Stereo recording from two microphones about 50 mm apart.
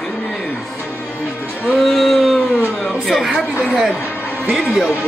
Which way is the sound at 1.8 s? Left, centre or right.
Centre.